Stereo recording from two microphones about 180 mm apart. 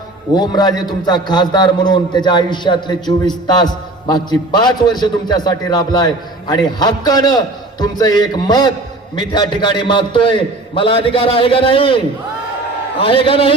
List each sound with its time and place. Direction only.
0.3 s a man's voice: 20° left (ahead or behind)
13.0 s a man's voice: 30° left (ahead or behind)